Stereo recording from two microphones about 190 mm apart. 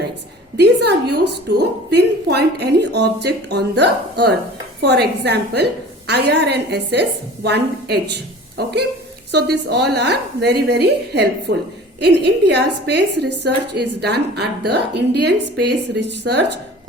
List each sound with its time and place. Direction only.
0.5 s a woman's voice: 60° right (ahead or behind)